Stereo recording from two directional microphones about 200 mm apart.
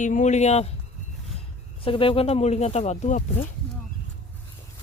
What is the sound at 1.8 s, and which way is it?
Speech, 25° left (ahead or behind).